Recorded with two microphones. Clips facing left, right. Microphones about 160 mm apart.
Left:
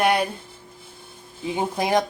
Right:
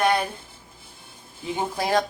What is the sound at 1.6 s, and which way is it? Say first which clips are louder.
Speech: left 2 dB; 20° left (ahead or behind).